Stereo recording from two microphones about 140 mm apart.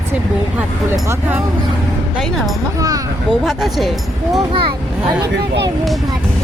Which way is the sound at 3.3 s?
Centre (ahead or behind).